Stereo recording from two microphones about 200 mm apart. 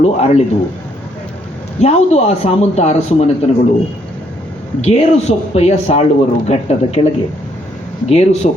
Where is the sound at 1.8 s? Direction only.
35° left (ahead or behind).